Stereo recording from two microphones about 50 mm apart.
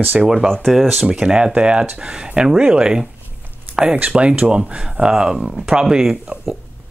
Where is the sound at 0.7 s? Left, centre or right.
Centre.